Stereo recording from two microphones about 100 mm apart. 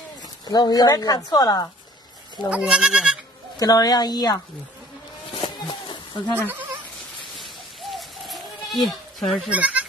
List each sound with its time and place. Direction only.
0.5 s a woman's voice: 40° left (ahead or behind)
2.5 s speech: 5° right (ahead or behind)
3.5 s a woman's voice: 40° left (ahead or behind)
5.6 s a sound: 45° left (ahead or behind)
7.3 s goat: centre (ahead or behind)
8.8 s speech: centre (ahead or behind)
9.5 s speech: 15° right (ahead or behind)